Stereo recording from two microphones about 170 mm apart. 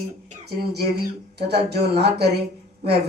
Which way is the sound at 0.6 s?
70° right (ahead or behind).